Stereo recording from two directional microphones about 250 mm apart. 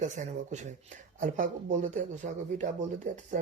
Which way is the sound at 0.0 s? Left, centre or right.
Right.